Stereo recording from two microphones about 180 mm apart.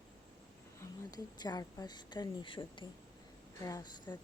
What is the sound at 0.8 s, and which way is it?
Speech, 20° left (ahead or behind).